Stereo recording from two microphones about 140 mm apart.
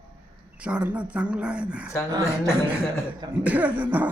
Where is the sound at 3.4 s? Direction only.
10° right (ahead or behind).